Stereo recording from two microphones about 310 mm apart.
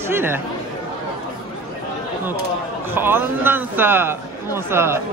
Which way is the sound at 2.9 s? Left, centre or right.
Centre.